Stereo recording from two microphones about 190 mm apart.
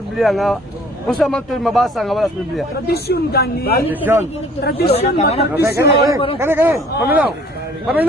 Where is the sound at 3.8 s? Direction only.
10° right (ahead or behind).